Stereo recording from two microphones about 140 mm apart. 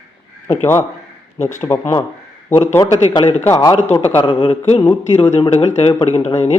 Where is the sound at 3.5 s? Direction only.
25° left (ahead or behind); by 4.8 s 45° left (ahead or behind).